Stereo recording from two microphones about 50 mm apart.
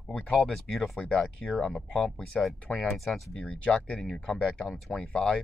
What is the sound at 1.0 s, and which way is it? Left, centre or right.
Speech, centre.